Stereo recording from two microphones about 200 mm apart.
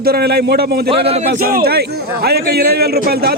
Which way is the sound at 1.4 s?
50° right (ahead or behind).